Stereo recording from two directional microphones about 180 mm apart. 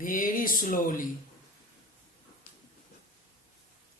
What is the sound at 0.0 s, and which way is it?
Speech, 50° left (ahead or behind).